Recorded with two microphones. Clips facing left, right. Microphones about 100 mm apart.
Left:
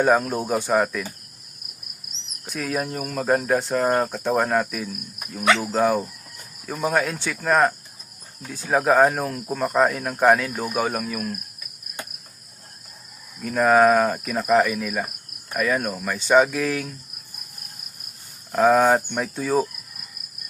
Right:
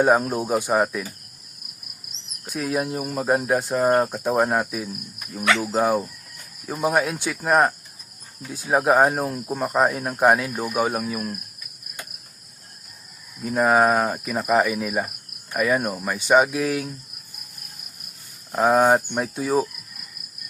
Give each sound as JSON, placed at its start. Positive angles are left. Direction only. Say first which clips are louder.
{"t": 0.0, "sound": "cricket", "louder": "right 1 dB", "side_deg": -15}
{"t": 2.6, "sound": "cricket", "louder": "right 2 dB", "side_deg": -10}
{"t": 13.4, "sound": "cricket", "louder": "left 2 dB", "side_deg": -10}
{"t": 18.5, "sound": "cricket", "louder": "left 1 dB", "side_deg": -5}